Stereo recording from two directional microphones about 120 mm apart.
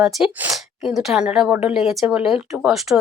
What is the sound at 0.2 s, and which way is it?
Speech, 10° right (ahead or behind).